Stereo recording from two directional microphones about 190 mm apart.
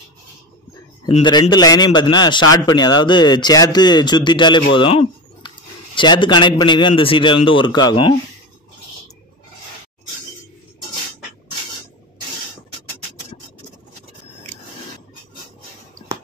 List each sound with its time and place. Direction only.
1.0 s a man's voice: 25° left (ahead or behind)
4.7 s a sound: 25° left (ahead or behind)
5.9 s a man's voice: 25° left (ahead or behind)